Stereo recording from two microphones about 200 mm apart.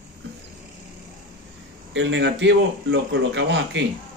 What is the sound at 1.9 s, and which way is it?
A man's voice, 65° right (ahead or behind).